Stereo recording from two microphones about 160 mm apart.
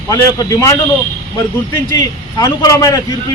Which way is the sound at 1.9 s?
25° left (ahead or behind).